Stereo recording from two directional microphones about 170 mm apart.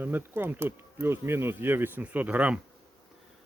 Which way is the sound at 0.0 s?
10° right (ahead or behind).